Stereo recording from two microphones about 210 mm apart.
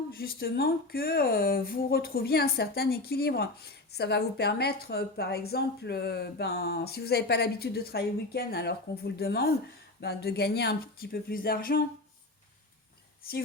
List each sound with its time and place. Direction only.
0.1 s speech: 45° left (ahead or behind)